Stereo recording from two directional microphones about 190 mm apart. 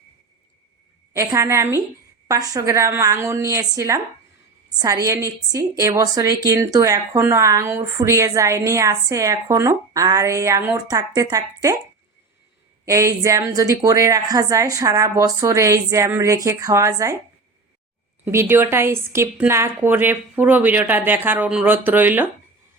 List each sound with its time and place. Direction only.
1.1 s a woman's voice: 15° right (ahead or behind)
12.8 s a woman's voice: 15° right (ahead or behind)
18.3 s a woman's voice: 15° right (ahead or behind)